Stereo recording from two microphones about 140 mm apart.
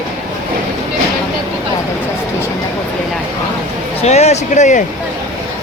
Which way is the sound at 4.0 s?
50° left (ahead or behind).